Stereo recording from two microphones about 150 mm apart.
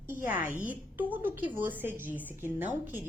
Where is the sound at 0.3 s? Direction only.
10° right (ahead or behind).